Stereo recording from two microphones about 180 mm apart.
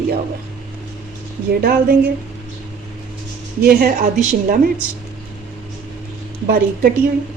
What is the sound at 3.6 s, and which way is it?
Speech, 55° right (ahead or behind).